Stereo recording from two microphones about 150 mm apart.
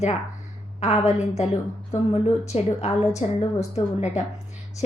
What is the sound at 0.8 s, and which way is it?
A woman's voice, 45° left (ahead or behind).